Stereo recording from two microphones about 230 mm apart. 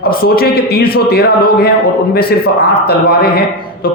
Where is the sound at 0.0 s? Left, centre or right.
Left.